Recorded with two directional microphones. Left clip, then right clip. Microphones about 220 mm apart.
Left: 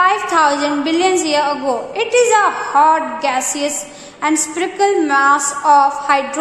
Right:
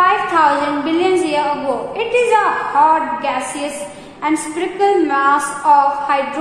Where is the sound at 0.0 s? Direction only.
50° left (ahead or behind).